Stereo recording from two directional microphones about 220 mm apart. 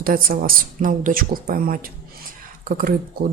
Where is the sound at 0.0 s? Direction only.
40° right (ahead or behind).